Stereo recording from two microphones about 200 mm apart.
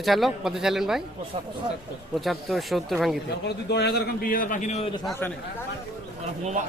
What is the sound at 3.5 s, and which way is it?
A man's voice, 55° left (ahead or behind).